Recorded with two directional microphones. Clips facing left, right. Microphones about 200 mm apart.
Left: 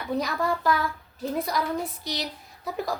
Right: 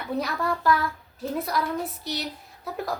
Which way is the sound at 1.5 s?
5° right (ahead or behind).